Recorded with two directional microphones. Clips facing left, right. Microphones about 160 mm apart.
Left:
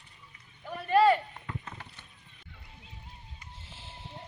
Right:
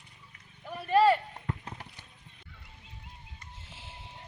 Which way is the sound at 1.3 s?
40° right (ahead or behind).